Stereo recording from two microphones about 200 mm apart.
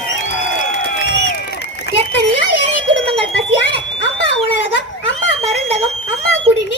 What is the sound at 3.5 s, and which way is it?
Fire alarm, 65° left (ahead or behind).